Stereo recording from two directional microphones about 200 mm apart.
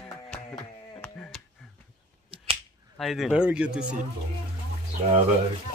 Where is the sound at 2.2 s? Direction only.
25° right (ahead or behind).